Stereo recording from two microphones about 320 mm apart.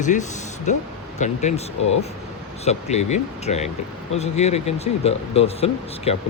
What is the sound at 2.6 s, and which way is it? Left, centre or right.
Speech, centre.